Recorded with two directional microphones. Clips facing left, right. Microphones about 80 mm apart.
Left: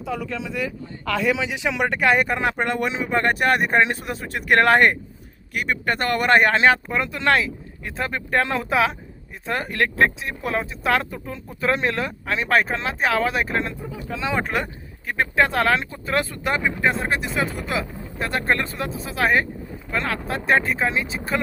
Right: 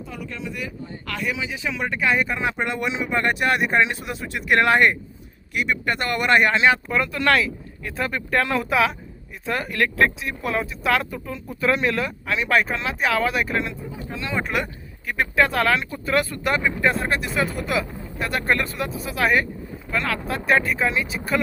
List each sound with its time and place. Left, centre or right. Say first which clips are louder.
1.3 s speech: left 4 dB; left
6.9 s speech: even; left